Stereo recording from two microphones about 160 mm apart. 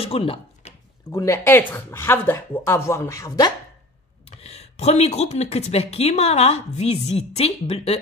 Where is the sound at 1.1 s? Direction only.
20° left (ahead or behind).